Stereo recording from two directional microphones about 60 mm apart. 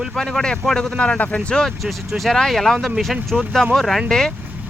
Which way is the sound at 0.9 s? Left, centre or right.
Centre.